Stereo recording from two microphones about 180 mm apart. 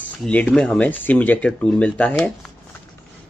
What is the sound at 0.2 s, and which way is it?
Speech, 5° left (ahead or behind).